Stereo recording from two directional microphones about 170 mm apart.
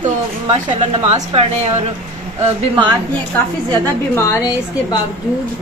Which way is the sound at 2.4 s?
25° right (ahead or behind).